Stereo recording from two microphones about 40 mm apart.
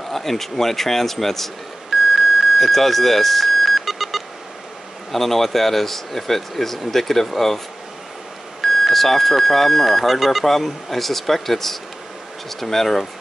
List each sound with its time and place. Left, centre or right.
0.1 s a man's voice: centre
1.9 s a sound: centre
5.1 s a man's voice: centre